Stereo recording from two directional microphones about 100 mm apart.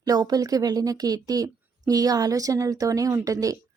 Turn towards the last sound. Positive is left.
turn(degrees=-35)  # may be behind; listen again after turning